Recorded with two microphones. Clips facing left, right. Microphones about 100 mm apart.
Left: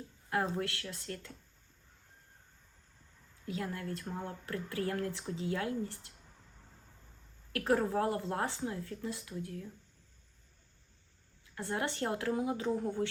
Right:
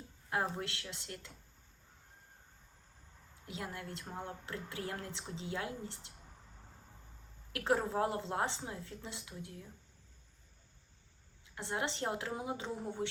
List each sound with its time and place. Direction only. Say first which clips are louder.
0.3 s speech: left 3 dB; 20° right (ahead or behind)
3.4 s speech: left 5 dB; 20° right (ahead or behind)
7.5 s speech: left 3 dB; 20° right (ahead or behind)
11.5 s speech: left 2 dB; 20° right (ahead or behind)